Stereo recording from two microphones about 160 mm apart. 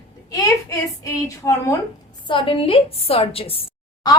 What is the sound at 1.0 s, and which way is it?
Speech, 20° left (ahead or behind).